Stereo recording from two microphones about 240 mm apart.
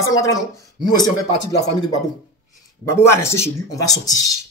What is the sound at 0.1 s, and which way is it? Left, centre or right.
Speech, centre.